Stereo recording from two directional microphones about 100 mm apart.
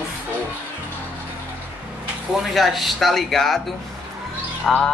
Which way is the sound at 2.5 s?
Centre (ahead or behind).